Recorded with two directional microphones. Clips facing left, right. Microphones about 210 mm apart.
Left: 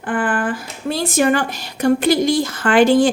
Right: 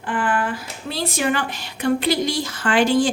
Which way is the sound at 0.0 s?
50° left (ahead or behind).